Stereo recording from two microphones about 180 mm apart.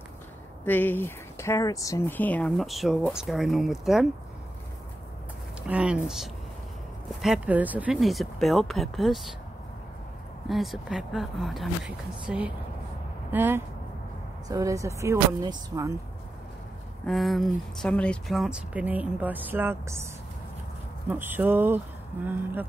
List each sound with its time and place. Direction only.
0.7 s speech: 10° left (ahead or behind)
5.7 s speech: 5° right (ahead or behind)
10.5 s speech: centre (ahead or behind); by 15.9 s 15° right (ahead or behind)
17.0 s speech: centre (ahead or behind)
21.1 s speech: 10° right (ahead or behind)